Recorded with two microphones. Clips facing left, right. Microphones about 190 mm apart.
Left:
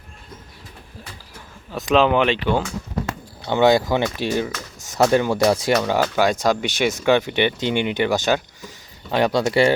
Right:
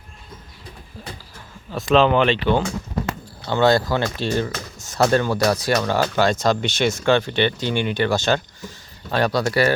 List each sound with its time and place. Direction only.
1.7 s speech: 10° left (ahead or behind)
5.3 s speech: 20° left (ahead or behind)